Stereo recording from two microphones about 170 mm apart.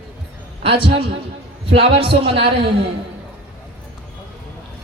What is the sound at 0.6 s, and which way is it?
Speech, 30° right (ahead or behind).